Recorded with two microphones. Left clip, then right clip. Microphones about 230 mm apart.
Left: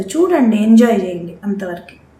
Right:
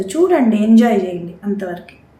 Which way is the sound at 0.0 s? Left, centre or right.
Centre.